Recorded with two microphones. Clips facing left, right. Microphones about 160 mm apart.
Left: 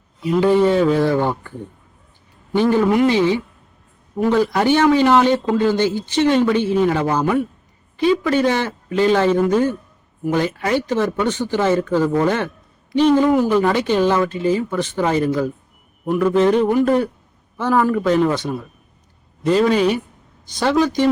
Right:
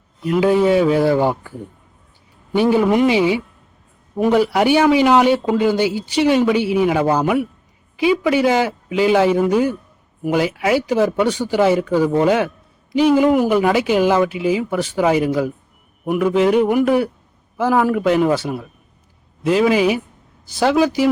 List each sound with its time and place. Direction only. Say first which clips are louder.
0.2 s speech: even; centre (ahead or behind)